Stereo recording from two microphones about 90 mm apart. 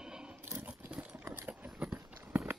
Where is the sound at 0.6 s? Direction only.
20° right (ahead or behind).